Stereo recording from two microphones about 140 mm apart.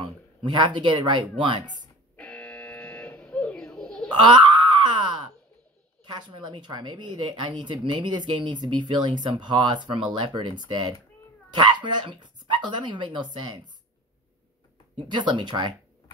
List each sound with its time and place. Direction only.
0.0 s speech: 35° right (ahead or behind)
2.1 s a sound: 10° left (ahead or behind)
4.1 s wail: 35° right (ahead or behind)
6.0 s a woman's voice: 30° right (ahead or behind)
15.0 s a woman's voice: 35° right (ahead or behind)